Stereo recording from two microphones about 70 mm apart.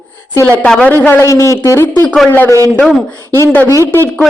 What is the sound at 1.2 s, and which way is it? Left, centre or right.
Speech, left.